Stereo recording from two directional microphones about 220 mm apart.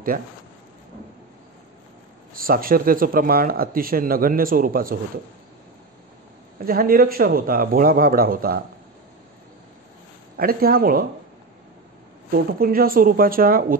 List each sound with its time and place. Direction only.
0.1 s speech: 40° right (ahead or behind)
2.3 s speech: 40° right (ahead or behind)
6.6 s speech: 40° right (ahead or behind)
10.3 s speech: 45° right (ahead or behind)
12.3 s speech: 40° right (ahead or behind)